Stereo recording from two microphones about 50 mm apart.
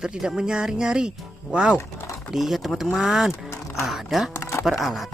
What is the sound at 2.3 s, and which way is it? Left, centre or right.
Speech, centre.